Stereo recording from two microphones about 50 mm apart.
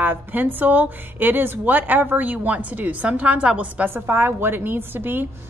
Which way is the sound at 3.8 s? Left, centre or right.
Right.